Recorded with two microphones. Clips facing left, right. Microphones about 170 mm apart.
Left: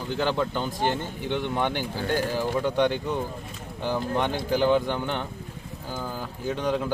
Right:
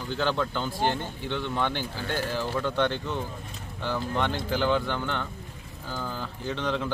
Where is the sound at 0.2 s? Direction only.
15° left (ahead or behind).